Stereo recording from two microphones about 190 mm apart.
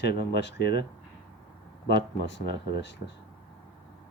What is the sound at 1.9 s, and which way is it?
Speech, 65° left (ahead or behind).